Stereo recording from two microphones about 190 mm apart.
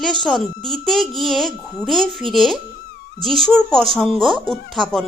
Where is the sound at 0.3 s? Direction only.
Centre (ahead or behind).